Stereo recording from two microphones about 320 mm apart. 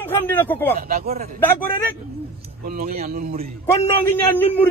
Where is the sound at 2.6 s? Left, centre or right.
Right.